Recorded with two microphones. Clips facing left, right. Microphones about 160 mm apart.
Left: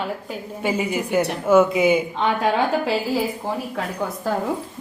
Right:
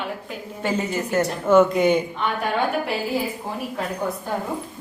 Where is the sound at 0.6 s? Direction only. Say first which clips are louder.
Left 1 dB; 10° left (ahead or behind).